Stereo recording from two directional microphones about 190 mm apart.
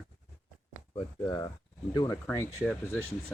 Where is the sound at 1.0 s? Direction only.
20° left (ahead or behind).